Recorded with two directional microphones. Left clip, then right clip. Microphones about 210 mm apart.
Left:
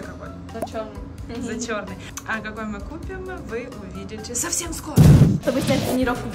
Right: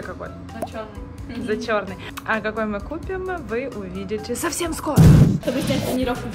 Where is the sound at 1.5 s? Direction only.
5° right (ahead or behind).